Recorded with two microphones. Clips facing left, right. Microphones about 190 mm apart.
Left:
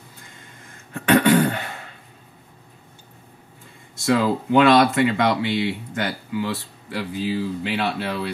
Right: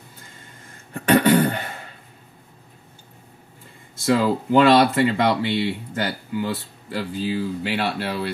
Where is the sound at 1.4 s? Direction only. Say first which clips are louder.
Even; centre (ahead or behind).